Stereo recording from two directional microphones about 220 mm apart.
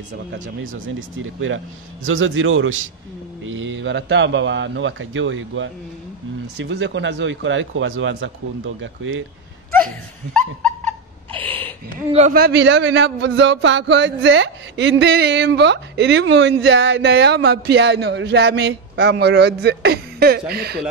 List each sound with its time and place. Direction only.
0.3 s a man's voice: 60° right (ahead or behind)
12.1 s a man's voice: 30° right (ahead or behind)
12.4 s speech: 55° right (ahead or behind)